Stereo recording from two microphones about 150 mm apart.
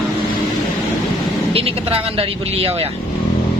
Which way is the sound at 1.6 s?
40° right (ahead or behind).